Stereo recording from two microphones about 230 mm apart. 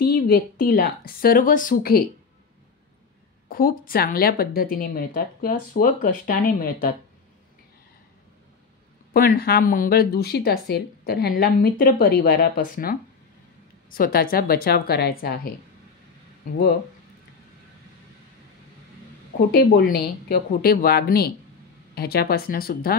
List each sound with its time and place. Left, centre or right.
0.0 s a sound: left
0.7 s speech: left
3.4 s speech: left
9.1 s speech: left
19.5 s speech: left